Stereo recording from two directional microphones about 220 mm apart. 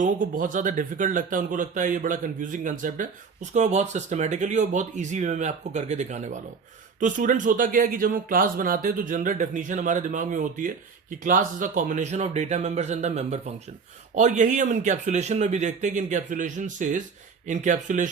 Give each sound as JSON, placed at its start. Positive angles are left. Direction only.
{"t": 0.0, "sound": "speech", "side_deg": -35}